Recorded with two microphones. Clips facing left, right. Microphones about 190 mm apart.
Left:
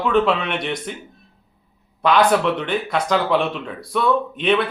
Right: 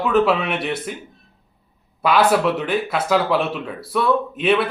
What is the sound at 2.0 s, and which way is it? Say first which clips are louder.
Speech: even; 5° right (ahead or behind).